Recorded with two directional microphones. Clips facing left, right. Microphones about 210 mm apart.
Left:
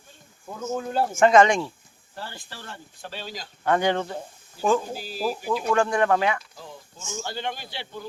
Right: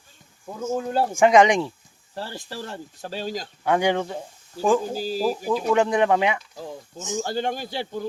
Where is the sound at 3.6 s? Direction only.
10° right (ahead or behind).